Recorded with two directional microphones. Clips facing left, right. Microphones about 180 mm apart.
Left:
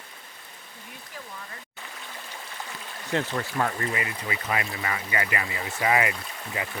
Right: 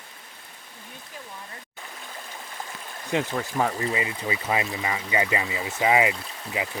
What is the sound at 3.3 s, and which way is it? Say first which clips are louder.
Speech: right 2 dB; 10° right (ahead or behind).